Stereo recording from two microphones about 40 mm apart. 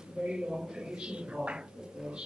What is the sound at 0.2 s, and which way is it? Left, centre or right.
A man's voice, right.